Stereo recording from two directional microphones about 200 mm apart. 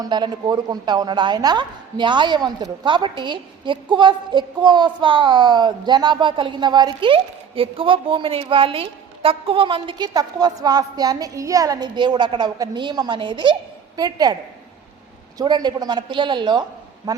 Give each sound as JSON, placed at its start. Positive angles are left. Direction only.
{"t": 0.0, "sound": "a woman's voice", "side_deg": -20}
{"t": 15.4, "sound": "a woman's voice", "side_deg": -20}